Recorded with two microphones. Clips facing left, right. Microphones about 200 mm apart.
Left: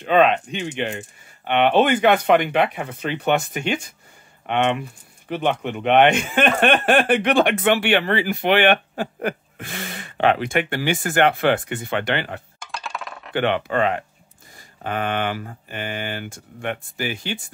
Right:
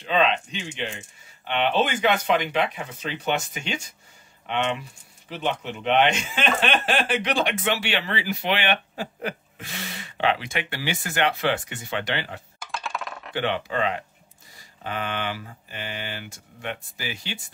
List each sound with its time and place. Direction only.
0.0 s speech: 55° left (ahead or behind)
12.5 s coin: centre (ahead or behind)
13.3 s speech: 60° left (ahead or behind)